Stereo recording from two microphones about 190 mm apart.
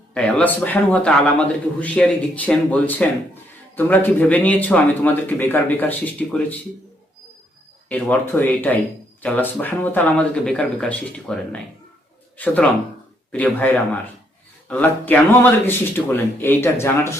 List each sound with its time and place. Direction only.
0.1 s a man's voice: 5° left (ahead or behind)
7.9 s a man's voice: 10° left (ahead or behind)